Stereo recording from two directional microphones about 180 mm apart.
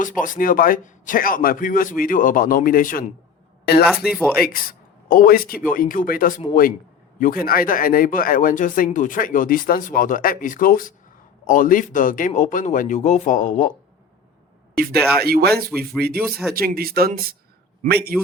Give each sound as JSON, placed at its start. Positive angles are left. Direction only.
{"t": 0.2, "sound": "speech", "side_deg": 50}
{"t": 15.2, "sound": "speech", "side_deg": -60}
{"t": 16.1, "sound": "speech", "side_deg": 0}
{"t": 16.6, "sound": "speech", "side_deg": -55}